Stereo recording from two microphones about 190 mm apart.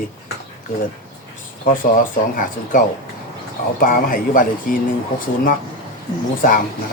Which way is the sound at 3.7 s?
45° left (ahead or behind).